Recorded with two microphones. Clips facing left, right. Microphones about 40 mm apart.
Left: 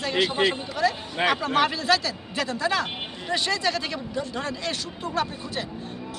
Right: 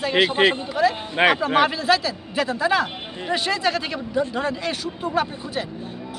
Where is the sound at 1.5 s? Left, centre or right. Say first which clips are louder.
Right 3 dB; centre.